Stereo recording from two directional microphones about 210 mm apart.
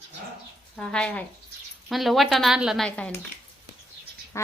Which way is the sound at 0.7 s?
5° left (ahead or behind).